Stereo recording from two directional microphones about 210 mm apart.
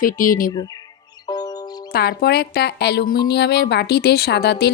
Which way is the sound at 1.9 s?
45° left (ahead or behind).